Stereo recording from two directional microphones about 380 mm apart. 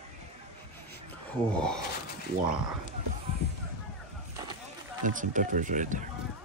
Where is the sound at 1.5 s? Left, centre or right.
Centre.